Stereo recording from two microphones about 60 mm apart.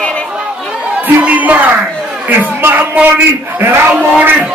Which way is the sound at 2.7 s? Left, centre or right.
Right.